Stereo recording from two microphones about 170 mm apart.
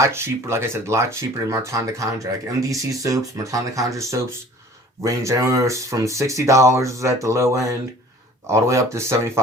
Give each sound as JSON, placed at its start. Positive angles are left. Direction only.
{"t": 0.0, "sound": "speech", "side_deg": -15}